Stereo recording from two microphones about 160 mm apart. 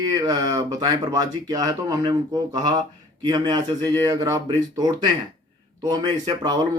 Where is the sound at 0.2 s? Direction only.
25° right (ahead or behind).